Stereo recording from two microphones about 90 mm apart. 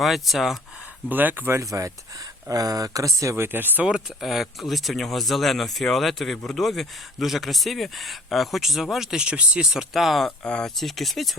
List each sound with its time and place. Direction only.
0.0 s speech: centre (ahead or behind)
1.1 s speech: 20° right (ahead or behind)
2.5 s speech: 40° right (ahead or behind); by 3.8 s 20° right (ahead or behind)
3.8 s speech: 5° right (ahead or behind)
10.2 s speech: 10° left (ahead or behind)